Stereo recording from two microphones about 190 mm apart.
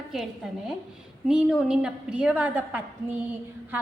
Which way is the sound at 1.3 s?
5° right (ahead or behind).